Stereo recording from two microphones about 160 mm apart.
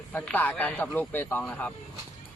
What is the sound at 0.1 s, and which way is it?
A man's voice, 10° left (ahead or behind).